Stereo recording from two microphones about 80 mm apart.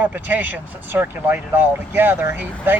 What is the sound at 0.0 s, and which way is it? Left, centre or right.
Speech, right.